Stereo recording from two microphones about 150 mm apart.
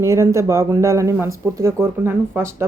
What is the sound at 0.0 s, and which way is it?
A woman's voice, 20° right (ahead or behind).